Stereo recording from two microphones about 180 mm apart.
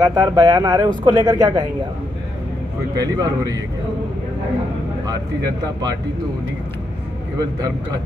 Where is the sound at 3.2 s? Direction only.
20° right (ahead or behind).